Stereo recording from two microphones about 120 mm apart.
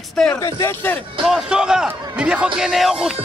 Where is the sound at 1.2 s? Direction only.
5° right (ahead or behind).